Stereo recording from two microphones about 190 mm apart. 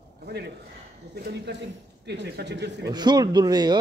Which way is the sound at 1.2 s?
60° right (ahead or behind).